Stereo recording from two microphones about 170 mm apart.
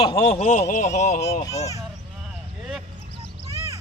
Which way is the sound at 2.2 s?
Centre (ahead or behind).